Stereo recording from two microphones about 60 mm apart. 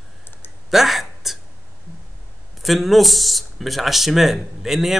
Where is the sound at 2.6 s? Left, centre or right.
Centre.